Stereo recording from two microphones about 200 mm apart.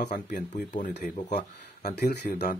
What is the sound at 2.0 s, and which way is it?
Speech, 55° left (ahead or behind).